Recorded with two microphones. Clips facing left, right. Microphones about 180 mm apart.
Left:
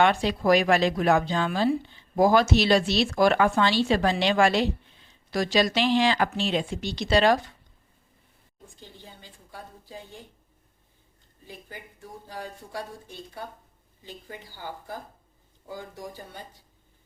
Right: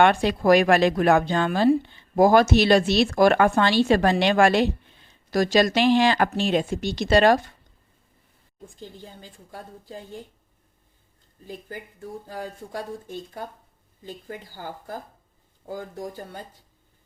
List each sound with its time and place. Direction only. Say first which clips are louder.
0.0 s speech: right 3 dB; 55° right (ahead or behind)
8.8 s speech: right 6 dB; 45° right (ahead or behind)
12.3 s speech: right 1 dB; 45° right (ahead or behind)